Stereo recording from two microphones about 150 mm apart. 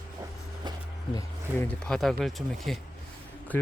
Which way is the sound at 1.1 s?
20° left (ahead or behind).